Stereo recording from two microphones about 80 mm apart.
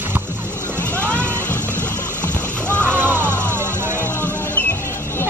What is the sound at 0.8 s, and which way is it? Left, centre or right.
Music, centre.